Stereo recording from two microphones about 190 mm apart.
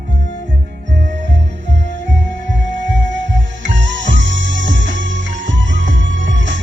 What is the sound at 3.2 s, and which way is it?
Music, 75° right (ahead or behind).